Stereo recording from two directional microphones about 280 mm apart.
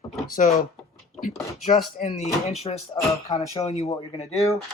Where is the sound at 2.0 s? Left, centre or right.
Left.